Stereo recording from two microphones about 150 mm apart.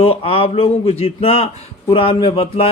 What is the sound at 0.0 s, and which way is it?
A man's voice, 40° left (ahead or behind).